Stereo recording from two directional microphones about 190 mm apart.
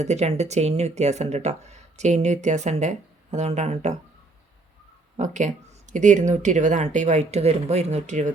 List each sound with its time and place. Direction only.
0.0 s speech: 35° right (ahead or behind)
5.1 s speech: 40° right (ahead or behind)